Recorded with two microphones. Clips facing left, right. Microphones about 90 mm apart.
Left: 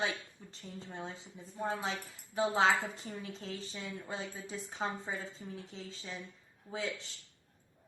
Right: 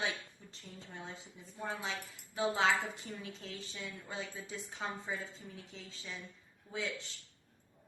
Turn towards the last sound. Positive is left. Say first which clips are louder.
# left 2 dB
turn(degrees=35)  # may be behind; listen again after turning